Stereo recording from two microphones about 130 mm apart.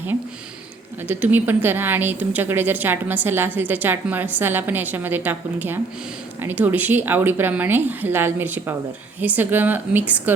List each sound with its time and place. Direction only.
1.0 s a woman's voice: 15° right (ahead or behind)